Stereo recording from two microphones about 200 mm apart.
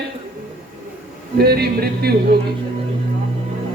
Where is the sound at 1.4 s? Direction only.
50° right (ahead or behind).